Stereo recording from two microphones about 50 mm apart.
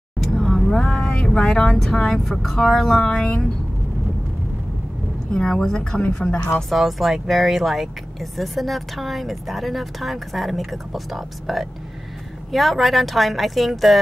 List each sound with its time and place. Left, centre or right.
0.2 s vehicle: centre
0.8 s speech: centre
3.1 s a woman's voice: centre
5.3 s a woman's voice: centre
6.7 s speech: centre